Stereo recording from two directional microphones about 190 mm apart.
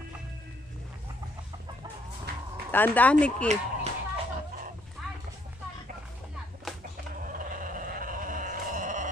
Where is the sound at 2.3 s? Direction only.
60° right (ahead or behind).